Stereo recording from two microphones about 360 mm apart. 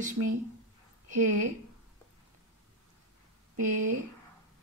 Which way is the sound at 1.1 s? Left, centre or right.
Right.